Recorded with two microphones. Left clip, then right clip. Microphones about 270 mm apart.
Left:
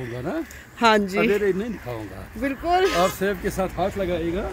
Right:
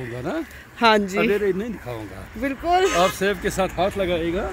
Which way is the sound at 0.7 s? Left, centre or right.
Centre.